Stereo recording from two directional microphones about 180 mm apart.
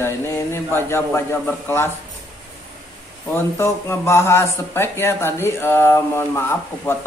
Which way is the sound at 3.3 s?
15° left (ahead or behind).